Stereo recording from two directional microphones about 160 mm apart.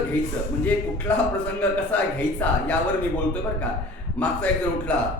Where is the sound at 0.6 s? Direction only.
10° left (ahead or behind).